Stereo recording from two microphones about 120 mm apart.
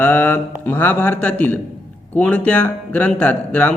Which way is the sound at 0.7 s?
15° left (ahead or behind).